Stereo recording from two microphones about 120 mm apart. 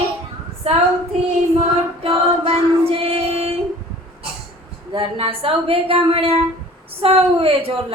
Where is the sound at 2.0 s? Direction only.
50° right (ahead or behind).